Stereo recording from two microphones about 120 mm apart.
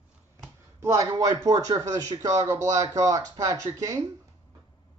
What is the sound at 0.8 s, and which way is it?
Speech, 25° right (ahead or behind).